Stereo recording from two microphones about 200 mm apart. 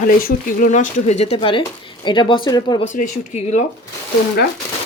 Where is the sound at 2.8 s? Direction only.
40° left (ahead or behind).